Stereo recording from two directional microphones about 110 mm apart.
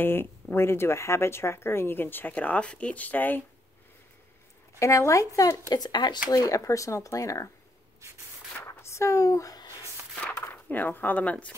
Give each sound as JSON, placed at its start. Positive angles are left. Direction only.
{"t": 0.0, "sound": "speech", "side_deg": 20}
{"t": 4.7, "sound": "speech", "side_deg": 30}
{"t": 5.7, "sound": "speech", "side_deg": 40}
{"t": 8.6, "sound": "a sound", "side_deg": 25}
{"t": 10.5, "sound": "speech", "side_deg": 15}